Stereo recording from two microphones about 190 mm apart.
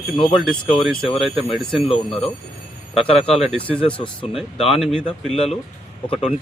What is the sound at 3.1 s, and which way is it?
Speech, 30° left (ahead or behind).